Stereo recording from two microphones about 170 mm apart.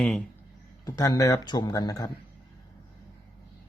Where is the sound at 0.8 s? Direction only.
20° left (ahead or behind).